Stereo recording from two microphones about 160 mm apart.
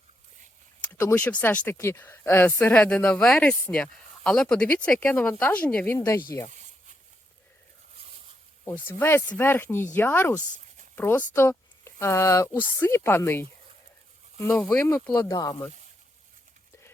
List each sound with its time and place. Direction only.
0.9 s speech: 10° left (ahead or behind)
8.6 s speech: 15° left (ahead or behind)